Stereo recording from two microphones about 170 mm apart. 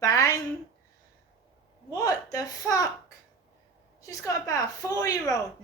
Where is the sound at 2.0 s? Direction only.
20° left (ahead or behind).